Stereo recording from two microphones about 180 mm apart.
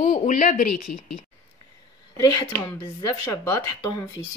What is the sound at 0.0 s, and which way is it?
Speech, 50° left (ahead or behind).